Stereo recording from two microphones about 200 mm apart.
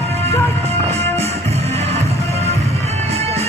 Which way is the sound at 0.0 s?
30° right (ahead or behind).